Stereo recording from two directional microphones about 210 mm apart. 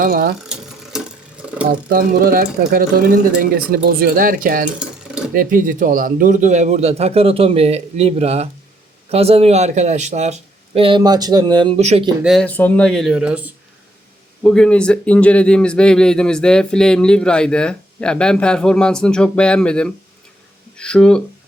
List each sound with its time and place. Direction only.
0.0 s speech: 45° right (ahead or behind)
0.4 s mechanisms: 5° right (ahead or behind)
1.9 s speech: 45° right (ahead or behind)
4.8 s dishes: 5° right (ahead or behind)
5.3 s a man's voice: 40° right (ahead or behind); by 11.8 s 20° right (ahead or behind)
11.8 s a man's voice: 35° right (ahead or behind)
12.2 s speech: centre (ahead or behind)